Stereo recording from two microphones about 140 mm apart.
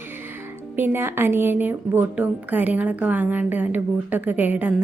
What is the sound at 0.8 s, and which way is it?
A woman's voice, 15° right (ahead or behind).